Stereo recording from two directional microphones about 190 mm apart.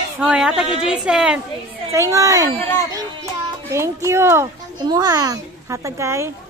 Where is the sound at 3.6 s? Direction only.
15° right (ahead or behind).